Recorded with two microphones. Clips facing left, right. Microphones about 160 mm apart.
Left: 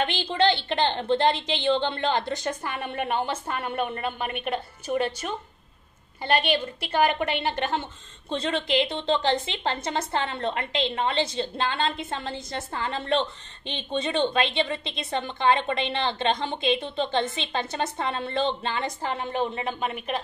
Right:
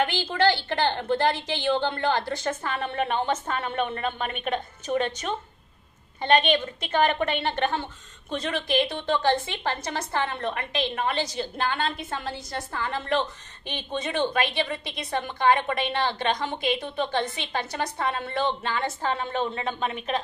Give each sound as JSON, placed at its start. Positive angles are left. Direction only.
{"t": 0.3, "sound": "a woman's voice", "side_deg": 20}
{"t": 6.2, "sound": "a woman's voice", "side_deg": 10}
{"t": 7.8, "sound": "a woman's voice", "side_deg": 25}